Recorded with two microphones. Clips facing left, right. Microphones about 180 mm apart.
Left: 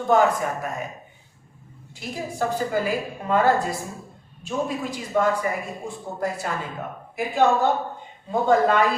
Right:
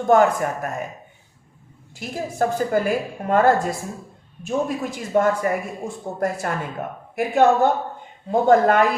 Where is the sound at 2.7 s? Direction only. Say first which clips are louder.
Right 4 dB; 50° right (ahead or behind).